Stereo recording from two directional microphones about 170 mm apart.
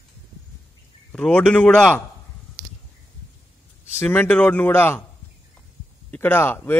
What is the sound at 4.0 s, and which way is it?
A man's voice, 10° left (ahead or behind).